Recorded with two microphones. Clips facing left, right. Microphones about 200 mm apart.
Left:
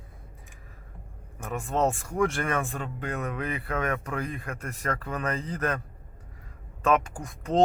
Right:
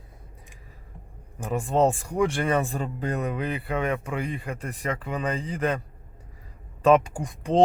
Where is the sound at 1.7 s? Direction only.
15° right (ahead or behind).